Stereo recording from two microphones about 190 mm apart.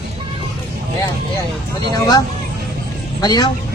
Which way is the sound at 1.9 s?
20° left (ahead or behind).